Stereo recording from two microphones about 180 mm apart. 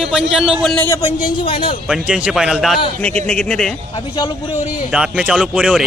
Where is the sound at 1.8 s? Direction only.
5° right (ahead or behind).